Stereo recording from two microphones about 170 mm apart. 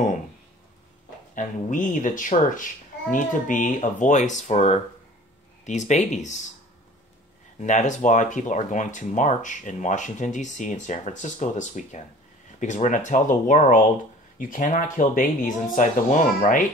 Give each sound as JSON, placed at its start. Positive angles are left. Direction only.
{"t": 1.3, "sound": "speech", "side_deg": 50}
{"t": 7.6, "sound": "speech", "side_deg": 45}